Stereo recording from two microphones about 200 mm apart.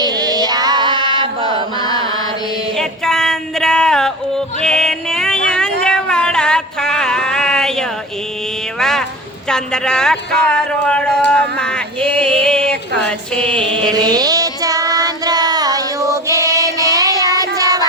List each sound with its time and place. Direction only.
0.0 s music: 20° right (ahead or behind)
1.8 s chant: 20° left (ahead or behind)
2.7 s yodeling: centre (ahead or behind)
5.8 s a sound: 5° left (ahead or behind)
9.5 s speech: 5° left (ahead or behind)
13.8 s child singing: 20° right (ahead or behind)